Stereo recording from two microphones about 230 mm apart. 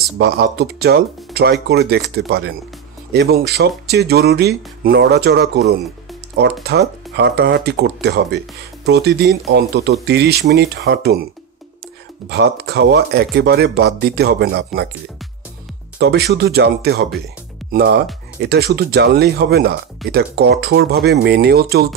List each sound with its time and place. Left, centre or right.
0.2 s speech: right
12.3 s speech: right
16.0 s speech: right